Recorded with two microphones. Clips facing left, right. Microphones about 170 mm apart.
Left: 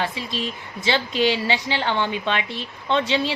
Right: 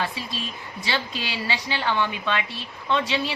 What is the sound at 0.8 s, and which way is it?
A woman's voice, 25° left (ahead or behind).